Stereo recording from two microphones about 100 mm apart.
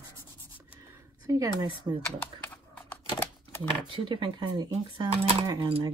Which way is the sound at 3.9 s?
55° right (ahead or behind).